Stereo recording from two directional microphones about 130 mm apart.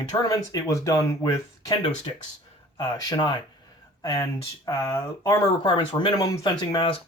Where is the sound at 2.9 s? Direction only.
35° left (ahead or behind).